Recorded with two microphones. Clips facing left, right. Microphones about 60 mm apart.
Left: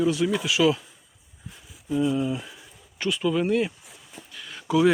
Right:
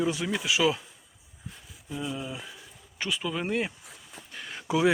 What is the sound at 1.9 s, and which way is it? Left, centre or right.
Speech, centre.